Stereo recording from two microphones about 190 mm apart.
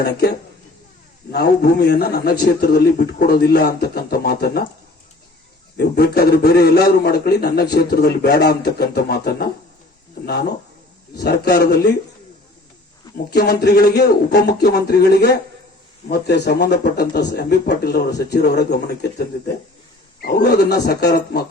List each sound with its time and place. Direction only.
0.0 s a man's voice: 60° left (ahead or behind)
5.7 s a man's voice: 55° left (ahead or behind)
11.2 s a man's voice: 60° left (ahead or behind)
13.3 s a man's voice: 55° left (ahead or behind)